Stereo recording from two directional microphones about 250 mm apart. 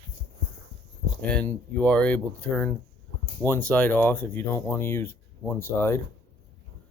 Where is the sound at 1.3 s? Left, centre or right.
Centre.